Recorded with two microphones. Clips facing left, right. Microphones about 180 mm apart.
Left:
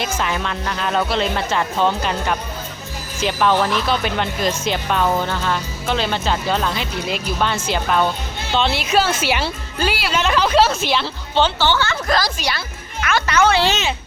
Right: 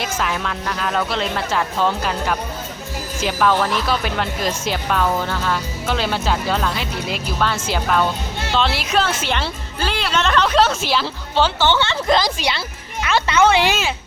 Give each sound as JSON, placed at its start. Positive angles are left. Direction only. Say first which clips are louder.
{"t": 0.0, "sound": "speech", "louder": "left 1 dB", "side_deg": 0}
{"t": 5.0, "sound": "speech", "louder": "left 3 dB", "side_deg": 10}
{"t": 5.3, "sound": "speech", "louder": "even", "side_deg": -5}
{"t": 11.7, "sound": "speech", "louder": "right 2 dB", "side_deg": -25}
{"t": 13.5, "sound": "speech", "louder": "even", "side_deg": -15}